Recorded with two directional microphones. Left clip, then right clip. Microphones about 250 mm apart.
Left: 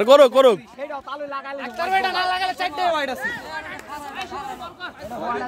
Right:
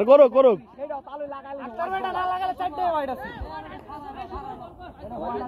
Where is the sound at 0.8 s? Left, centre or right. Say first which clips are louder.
Left 2 dB; left.